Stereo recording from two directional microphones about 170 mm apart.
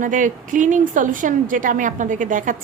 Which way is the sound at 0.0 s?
50° right (ahead or behind).